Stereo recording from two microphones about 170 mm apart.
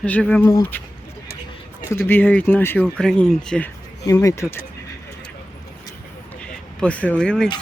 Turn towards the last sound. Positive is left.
turn(degrees=5)  # may be behind; listen again after turning